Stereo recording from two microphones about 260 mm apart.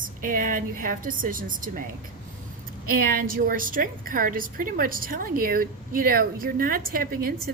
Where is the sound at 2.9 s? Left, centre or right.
Right.